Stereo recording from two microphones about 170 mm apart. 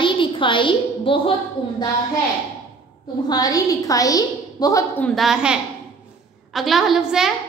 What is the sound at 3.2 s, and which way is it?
A woman's voice, 20° left (ahead or behind).